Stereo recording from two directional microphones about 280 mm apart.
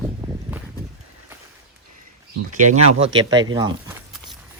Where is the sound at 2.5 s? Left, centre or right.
Right.